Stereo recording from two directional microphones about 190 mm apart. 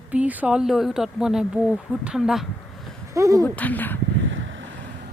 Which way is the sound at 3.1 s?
15° right (ahead or behind).